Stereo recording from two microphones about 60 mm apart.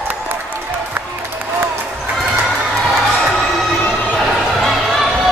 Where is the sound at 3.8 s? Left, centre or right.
Left.